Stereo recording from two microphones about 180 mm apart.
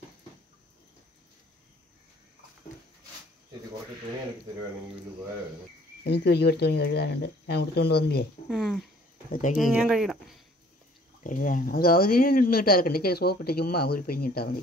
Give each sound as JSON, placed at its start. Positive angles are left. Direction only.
{"t": 6.0, "sound": "speech", "side_deg": 65}
{"t": 8.5, "sound": "speech", "side_deg": 5}
{"t": 11.2, "sound": "speech", "side_deg": 50}